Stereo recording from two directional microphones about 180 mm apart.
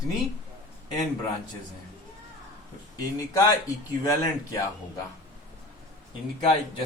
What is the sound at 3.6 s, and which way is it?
Speech, 20° left (ahead or behind).